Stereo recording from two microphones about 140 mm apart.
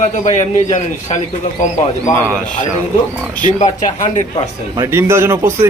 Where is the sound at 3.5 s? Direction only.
55° left (ahead or behind).